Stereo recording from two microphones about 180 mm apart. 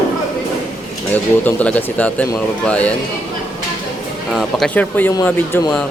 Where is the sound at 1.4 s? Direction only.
10° left (ahead or behind).